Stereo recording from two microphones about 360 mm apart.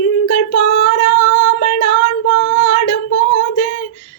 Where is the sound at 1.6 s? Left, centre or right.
Left.